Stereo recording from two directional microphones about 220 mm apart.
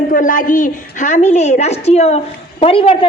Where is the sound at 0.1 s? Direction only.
35° left (ahead or behind).